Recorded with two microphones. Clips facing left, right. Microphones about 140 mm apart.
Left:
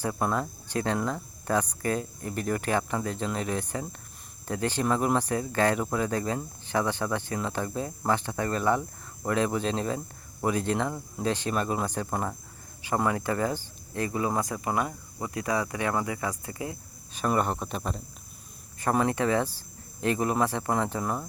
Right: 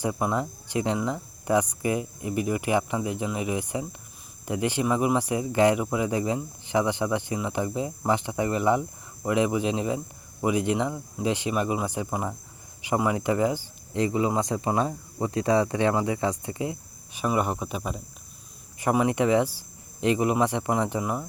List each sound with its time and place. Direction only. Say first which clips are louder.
0.0 s speech: right 2 dB; 15° right (ahead or behind)